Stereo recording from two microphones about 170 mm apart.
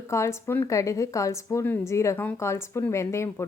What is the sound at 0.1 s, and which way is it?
A woman's voice, 15° left (ahead or behind).